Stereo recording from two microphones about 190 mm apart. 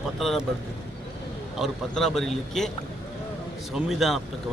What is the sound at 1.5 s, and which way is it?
A man's voice, centre (ahead or behind).